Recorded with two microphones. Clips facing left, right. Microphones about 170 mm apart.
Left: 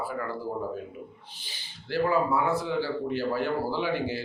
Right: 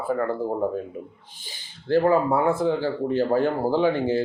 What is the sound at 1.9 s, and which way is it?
Speech, 50° right (ahead or behind).